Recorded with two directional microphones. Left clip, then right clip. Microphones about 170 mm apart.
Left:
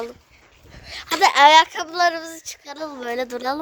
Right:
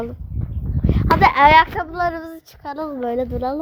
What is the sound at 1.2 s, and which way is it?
Speech, 30° left (ahead or behind).